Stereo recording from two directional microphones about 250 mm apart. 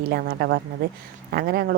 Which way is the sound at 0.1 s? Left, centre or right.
Right.